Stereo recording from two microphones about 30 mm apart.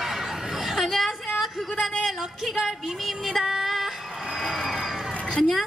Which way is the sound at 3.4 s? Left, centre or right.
Centre.